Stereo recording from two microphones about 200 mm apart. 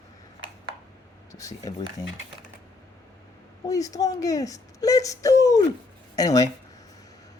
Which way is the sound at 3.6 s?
15° left (ahead or behind).